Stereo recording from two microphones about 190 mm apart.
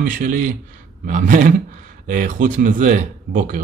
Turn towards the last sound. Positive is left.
turn(degrees=-45)  # may be behind; listen again after turning